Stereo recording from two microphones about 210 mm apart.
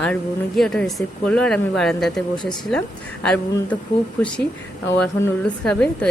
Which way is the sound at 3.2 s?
5° left (ahead or behind).